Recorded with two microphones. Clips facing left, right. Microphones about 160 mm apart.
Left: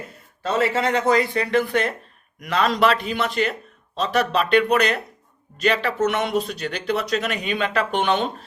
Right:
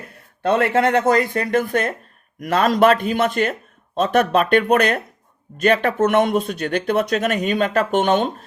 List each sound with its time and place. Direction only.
0.4 s speech: 55° right (ahead or behind)